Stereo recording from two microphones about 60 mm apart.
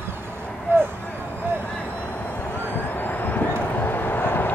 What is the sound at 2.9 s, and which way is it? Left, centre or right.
Vehicle, left.